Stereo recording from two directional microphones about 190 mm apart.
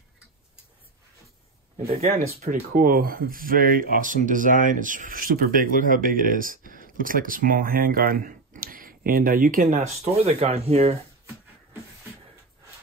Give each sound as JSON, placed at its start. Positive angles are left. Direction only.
{"t": 2.0, "sound": "speech", "side_deg": -40}
{"t": 9.8, "sound": "speech", "side_deg": -35}